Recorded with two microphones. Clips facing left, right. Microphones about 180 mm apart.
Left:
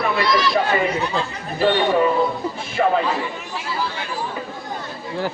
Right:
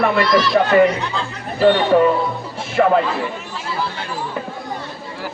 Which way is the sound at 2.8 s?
60° right (ahead or behind).